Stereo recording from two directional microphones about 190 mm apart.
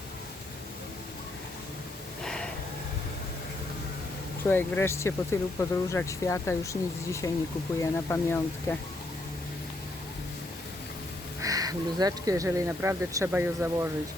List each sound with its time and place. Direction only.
2.2 s a sound: 5° left (ahead or behind)
4.4 s speech: 10° left (ahead or behind)
11.4 s speech: 20° right (ahead or behind)